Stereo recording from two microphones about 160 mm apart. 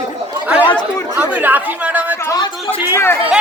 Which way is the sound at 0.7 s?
30° left (ahead or behind).